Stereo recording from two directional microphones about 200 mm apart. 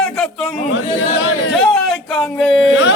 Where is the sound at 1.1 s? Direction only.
65° left (ahead or behind).